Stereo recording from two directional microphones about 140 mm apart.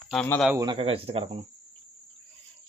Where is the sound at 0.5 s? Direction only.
30° right (ahead or behind).